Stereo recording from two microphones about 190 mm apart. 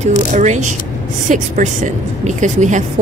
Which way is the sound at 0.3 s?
40° right (ahead or behind).